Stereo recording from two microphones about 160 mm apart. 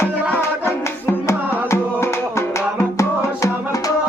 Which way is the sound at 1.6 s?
15° left (ahead or behind).